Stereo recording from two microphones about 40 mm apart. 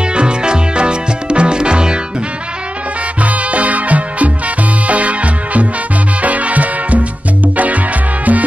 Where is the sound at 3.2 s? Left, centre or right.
Right.